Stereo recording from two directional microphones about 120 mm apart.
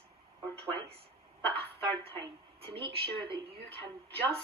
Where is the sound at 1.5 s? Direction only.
50° right (ahead or behind).